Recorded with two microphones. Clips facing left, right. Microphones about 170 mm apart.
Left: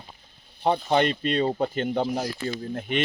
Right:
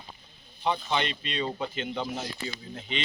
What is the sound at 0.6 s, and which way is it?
Speech, 50° left (ahead or behind).